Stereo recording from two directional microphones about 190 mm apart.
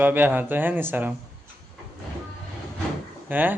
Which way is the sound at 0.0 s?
10° right (ahead or behind).